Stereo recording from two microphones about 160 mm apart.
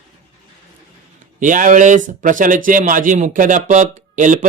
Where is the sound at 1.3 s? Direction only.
55° right (ahead or behind).